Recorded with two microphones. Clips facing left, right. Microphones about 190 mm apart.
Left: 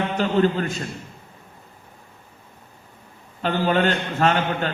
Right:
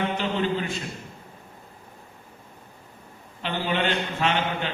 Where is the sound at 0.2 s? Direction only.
45° left (ahead or behind).